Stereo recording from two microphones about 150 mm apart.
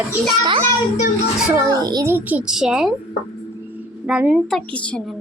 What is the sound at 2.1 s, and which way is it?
Speech, 10° right (ahead or behind).